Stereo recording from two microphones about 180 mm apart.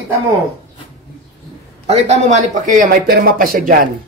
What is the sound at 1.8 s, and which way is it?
Speech, 40° right (ahead or behind).